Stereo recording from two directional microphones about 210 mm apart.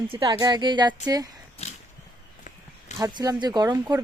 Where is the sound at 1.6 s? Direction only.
30° left (ahead or behind).